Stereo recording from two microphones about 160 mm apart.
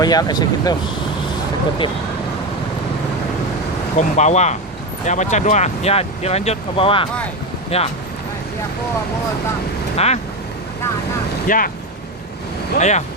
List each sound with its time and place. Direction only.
0.0 s speech: 25° left (ahead or behind)
3.9 s speech: 45° left (ahead or behind)
10.0 s speech: 40° left (ahead or behind)
11.4 s speech: 60° left (ahead or behind)
12.8 s speech: 45° left (ahead or behind)